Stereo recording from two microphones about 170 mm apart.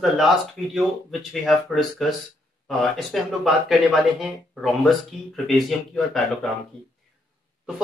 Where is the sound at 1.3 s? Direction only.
Centre (ahead or behind).